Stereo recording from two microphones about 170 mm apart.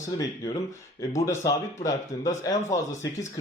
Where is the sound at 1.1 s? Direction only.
15° left (ahead or behind).